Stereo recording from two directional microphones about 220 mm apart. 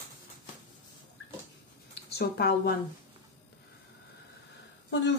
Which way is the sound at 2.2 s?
45° left (ahead or behind).